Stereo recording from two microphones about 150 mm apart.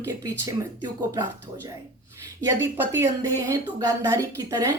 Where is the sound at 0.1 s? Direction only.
25° right (ahead or behind).